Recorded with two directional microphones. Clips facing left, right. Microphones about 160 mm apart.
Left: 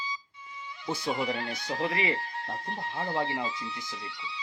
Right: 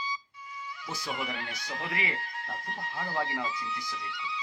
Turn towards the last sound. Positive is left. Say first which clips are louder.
# right 2 dB
turn(degrees=30)  # may be behind; listen again after turning